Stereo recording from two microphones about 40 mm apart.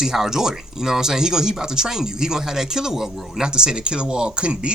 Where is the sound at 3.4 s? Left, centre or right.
Centre.